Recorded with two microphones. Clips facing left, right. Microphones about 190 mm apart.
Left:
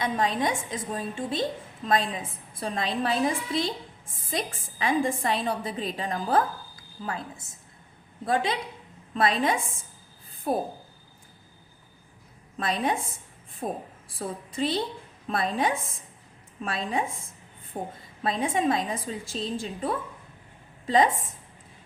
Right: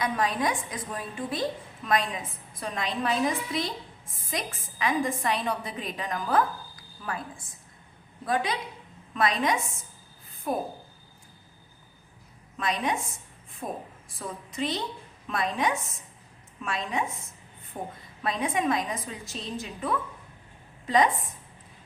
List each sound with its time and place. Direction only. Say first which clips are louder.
0.0 s a woman's voice: left 1 dB; 25° left (ahead or behind)
12.5 s a woman's voice: left 2 dB; 30° left (ahead or behind)